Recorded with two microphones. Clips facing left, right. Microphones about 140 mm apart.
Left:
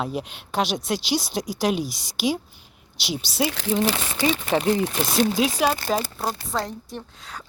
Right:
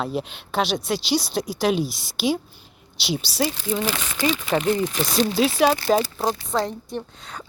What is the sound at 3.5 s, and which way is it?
Speech, 75° left (ahead or behind).